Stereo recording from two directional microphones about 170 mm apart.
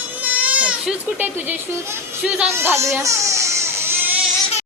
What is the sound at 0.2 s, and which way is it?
Speech, 10° right (ahead or behind).